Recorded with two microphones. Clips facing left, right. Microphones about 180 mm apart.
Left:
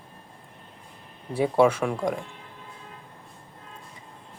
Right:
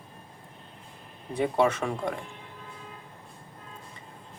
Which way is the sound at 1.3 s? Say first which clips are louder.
Left 4 dB; 5° left (ahead or behind).